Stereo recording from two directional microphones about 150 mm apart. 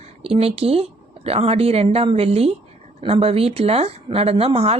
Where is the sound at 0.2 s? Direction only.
40° right (ahead or behind).